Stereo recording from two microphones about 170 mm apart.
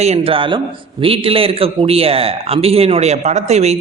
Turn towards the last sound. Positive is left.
turn(degrees=-40)  # may be behind; listen again after turning